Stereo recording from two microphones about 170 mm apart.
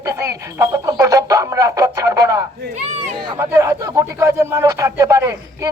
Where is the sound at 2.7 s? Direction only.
45° right (ahead or behind).